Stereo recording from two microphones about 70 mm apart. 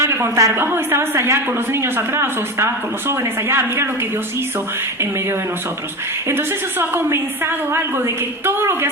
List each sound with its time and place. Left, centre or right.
0.0 s speech: right
0.6 s a woman's voice: right
6.2 s a woman's voice: right